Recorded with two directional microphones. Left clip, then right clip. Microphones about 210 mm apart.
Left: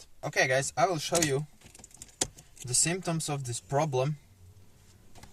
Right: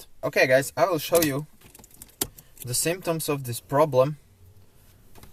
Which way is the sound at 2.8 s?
45° right (ahead or behind).